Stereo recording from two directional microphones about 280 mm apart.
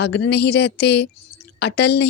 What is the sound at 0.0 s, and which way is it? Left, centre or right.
A woman's voice, left.